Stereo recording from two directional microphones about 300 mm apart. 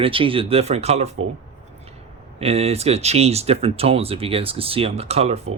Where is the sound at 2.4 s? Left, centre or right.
Centre.